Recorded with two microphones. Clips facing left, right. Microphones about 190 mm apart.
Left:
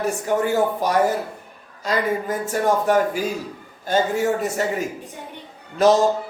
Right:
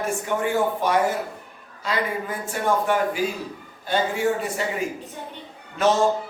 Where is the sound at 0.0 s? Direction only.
40° left (ahead or behind).